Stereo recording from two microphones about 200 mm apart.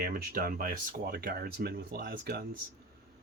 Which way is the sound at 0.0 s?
45° right (ahead or behind).